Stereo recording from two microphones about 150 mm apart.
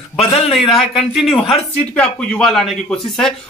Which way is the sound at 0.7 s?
Centre (ahead or behind).